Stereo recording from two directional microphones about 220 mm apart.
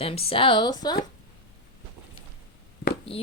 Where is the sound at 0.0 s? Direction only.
25° left (ahead or behind).